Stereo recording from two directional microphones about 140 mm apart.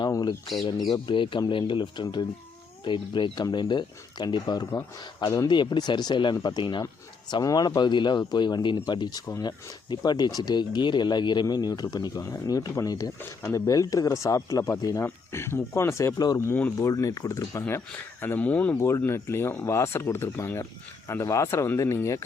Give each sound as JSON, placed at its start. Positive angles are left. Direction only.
{"t": 0.0, "sound": "squawk", "side_deg": 30}
{"t": 0.9, "sound": "a man's voice", "side_deg": 30}